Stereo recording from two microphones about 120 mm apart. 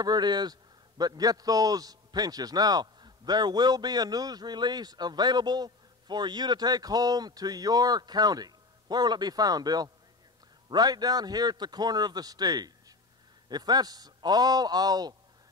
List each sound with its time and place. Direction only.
0.0 s a man's voice: 35° right (ahead or behind)